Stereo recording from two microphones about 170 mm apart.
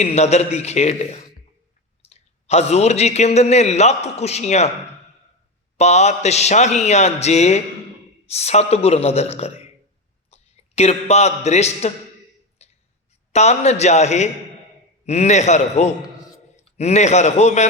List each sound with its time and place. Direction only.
0.0 s a man's voice: 40° left (ahead or behind)
5.7 s a man's voice: 40° left (ahead or behind)
12.6 s a sound: 40° left (ahead or behind)
13.3 s a man's voice: 40° left (ahead or behind)